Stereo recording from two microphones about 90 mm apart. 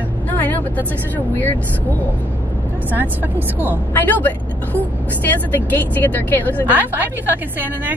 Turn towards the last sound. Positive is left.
turn(degrees=-20)  # may be behind; listen again after turning